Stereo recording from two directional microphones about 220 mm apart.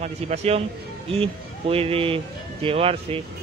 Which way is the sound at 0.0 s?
30° right (ahead or behind).